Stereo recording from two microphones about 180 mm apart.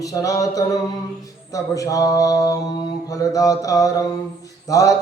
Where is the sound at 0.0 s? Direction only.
20° left (ahead or behind).